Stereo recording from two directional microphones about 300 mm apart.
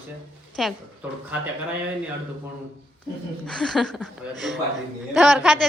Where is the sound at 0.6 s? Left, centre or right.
Centre.